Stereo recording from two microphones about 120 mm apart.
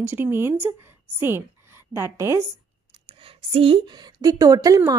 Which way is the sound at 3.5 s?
50° right (ahead or behind).